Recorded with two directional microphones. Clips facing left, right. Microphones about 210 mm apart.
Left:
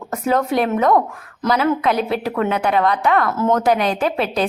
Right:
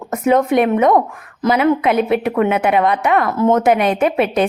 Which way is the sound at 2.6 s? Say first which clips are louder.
Right 2 dB; 20° right (ahead or behind).